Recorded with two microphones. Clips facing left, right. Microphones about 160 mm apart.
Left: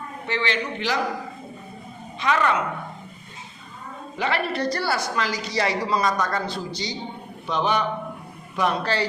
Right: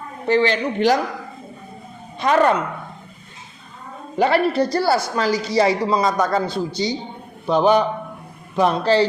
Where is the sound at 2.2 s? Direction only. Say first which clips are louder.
Right 6 dB; 45° right (ahead or behind).